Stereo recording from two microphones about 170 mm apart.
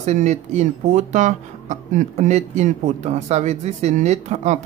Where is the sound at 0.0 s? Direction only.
40° right (ahead or behind).